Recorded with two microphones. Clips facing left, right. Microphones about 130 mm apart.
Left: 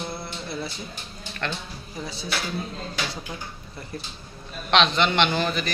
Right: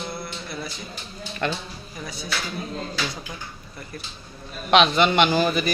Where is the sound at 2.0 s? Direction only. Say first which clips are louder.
Right 1 dB; 25° left (ahead or behind).